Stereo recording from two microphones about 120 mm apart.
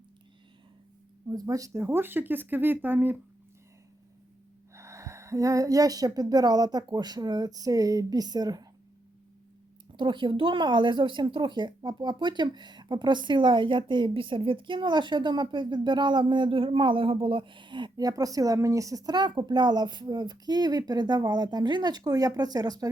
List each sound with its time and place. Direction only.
1.3 s speech: 30° right (ahead or behind)
4.7 s speech: 25° right (ahead or behind)
9.9 s speech: 40° right (ahead or behind)